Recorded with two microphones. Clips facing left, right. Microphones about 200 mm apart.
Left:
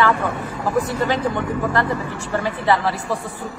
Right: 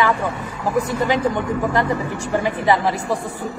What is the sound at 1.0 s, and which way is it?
A man's voice, 15° right (ahead or behind).